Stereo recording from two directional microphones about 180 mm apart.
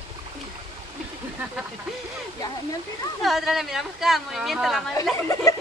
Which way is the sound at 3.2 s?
Centre (ahead or behind).